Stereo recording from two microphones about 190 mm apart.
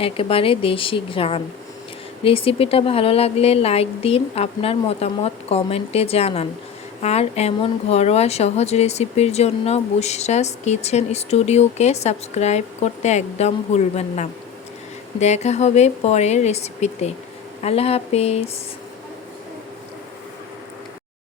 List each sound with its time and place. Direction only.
0.0 s a woman's voice: 30° left (ahead or behind)